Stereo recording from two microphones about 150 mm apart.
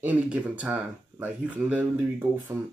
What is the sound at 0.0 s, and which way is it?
Speech, 10° right (ahead or behind).